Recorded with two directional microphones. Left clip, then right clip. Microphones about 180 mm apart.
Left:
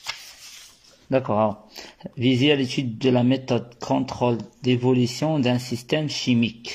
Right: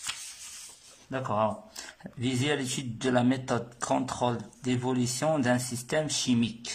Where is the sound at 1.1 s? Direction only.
25° left (ahead or behind).